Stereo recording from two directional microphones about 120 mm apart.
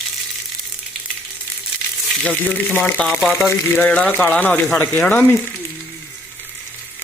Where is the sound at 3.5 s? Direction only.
20° left (ahead or behind).